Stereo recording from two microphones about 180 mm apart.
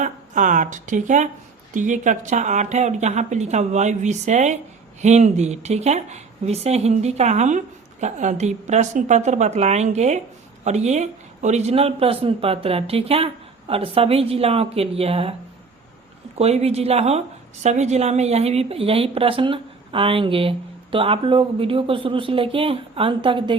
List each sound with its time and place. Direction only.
0.0 s a woman's voice: 45° right (ahead or behind)
16.4 s a woman's voice: 35° right (ahead or behind)